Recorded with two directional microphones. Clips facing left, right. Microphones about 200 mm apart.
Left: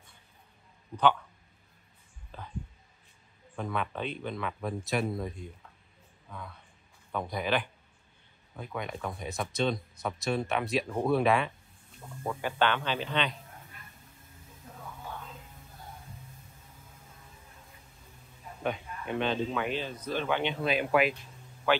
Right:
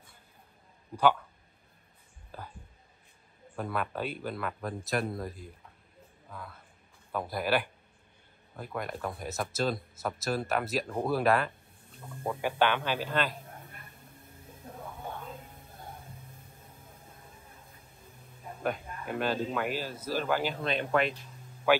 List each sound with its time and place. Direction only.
2.3 s a sound: 5° right (ahead or behind)
3.5 s a man's voice: 5° right (ahead or behind)
13.6 s a sound: 55° right (ahead or behind)
15.0 s music: 55° right (ahead or behind)
18.6 s speech: 5° right (ahead or behind)
21.7 s a man's voice: 10° right (ahead or behind)